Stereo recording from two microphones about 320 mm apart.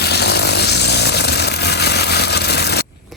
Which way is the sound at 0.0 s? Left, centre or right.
Left.